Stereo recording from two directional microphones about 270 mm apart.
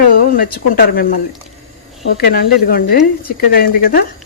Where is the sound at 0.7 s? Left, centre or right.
Left.